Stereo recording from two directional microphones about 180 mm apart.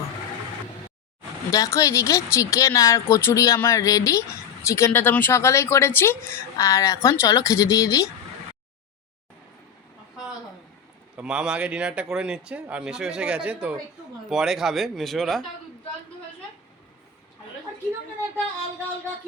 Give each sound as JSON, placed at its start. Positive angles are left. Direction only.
{"t": 1.5, "sound": "speech", "side_deg": 20}
{"t": 11.2, "sound": "speech", "side_deg": -5}